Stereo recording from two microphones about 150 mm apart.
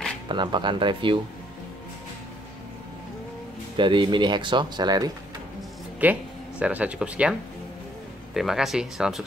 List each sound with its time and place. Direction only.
0.3 s speech: 30° right (ahead or behind)
3.7 s speech: 30° right (ahead or behind)
6.0 s speech: 10° right (ahead or behind)
8.4 s speech: centre (ahead or behind)